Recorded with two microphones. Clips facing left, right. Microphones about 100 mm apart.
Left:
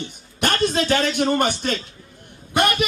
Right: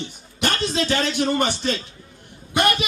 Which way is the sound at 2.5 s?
50° left (ahead or behind).